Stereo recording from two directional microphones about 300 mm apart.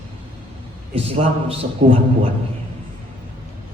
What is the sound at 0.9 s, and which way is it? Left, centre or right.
A man's voice, centre.